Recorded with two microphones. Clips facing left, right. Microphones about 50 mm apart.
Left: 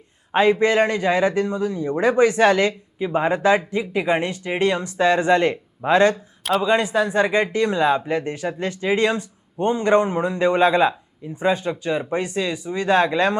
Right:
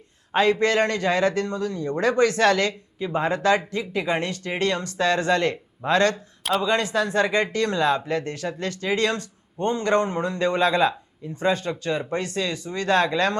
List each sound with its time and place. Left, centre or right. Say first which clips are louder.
0.3 s a man's voice: left 3 dB; centre